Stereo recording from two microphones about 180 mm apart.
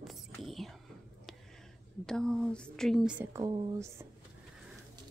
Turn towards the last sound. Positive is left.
turn(degrees=-15)  # may be behind; listen again after turning